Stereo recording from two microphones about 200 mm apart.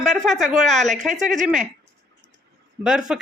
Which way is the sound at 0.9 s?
40° right (ahead or behind).